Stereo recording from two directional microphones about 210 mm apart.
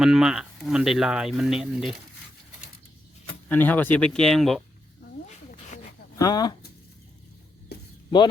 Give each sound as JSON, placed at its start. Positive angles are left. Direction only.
{"t": 0.0, "sound": "speech", "side_deg": 0}
{"t": 3.5, "sound": "speech", "side_deg": 10}
{"t": 6.1, "sound": "speech", "side_deg": 20}
{"t": 7.7, "sound": "a sound", "side_deg": 50}